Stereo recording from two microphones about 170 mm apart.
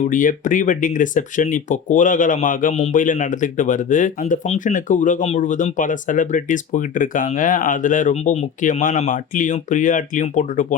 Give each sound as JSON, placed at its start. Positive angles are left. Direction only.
{"t": 0.1, "sound": "speech", "side_deg": 50}